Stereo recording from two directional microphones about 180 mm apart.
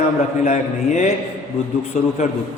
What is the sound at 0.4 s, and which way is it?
Speech, 40° left (ahead or behind).